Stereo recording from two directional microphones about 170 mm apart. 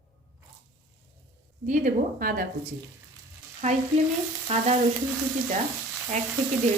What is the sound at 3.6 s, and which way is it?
Frying, 40° right (ahead or behind).